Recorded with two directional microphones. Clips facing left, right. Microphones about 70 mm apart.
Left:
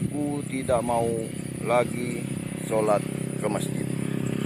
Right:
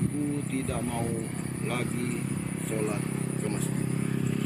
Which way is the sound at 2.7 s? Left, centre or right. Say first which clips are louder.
Left 9 dB; left.